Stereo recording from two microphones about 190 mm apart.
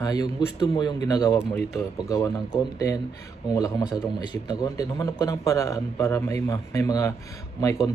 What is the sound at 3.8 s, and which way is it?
Speech, 5° right (ahead or behind).